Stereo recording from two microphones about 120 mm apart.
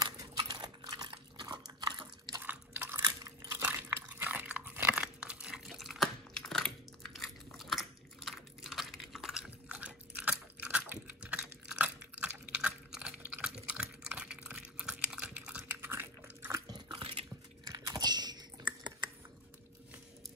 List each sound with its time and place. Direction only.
0.0 s chewing: 35° right (ahead or behind)
2.4 s a sound: 15° right (ahead or behind)
3.6 s crunch: 15° right (ahead or behind)
16.5 s biting: 35° right (ahead or behind)
17.6 s typing: 35° right (ahead or behind)